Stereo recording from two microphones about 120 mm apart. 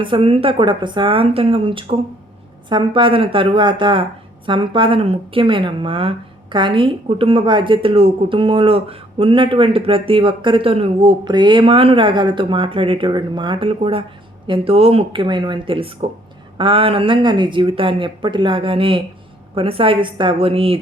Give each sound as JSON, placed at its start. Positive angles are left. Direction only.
{"t": 0.0, "sound": "speech", "side_deg": -50}
{"t": 11.3, "sound": "speech", "side_deg": -40}